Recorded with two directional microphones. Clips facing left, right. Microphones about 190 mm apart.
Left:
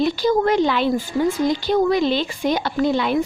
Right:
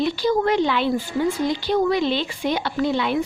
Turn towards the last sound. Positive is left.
turn(degrees=40)  # may be behind; listen again after turning